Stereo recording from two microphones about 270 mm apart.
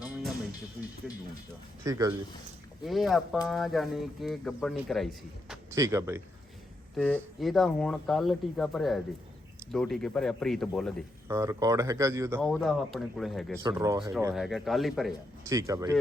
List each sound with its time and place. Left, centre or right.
1.8 s speech: centre
2.8 s speech: centre
5.7 s speech: centre
6.9 s speech: centre
11.3 s speech: centre
12.4 s speech: centre
13.6 s speech: centre
14.4 s speech: centre
15.4 s speech: centre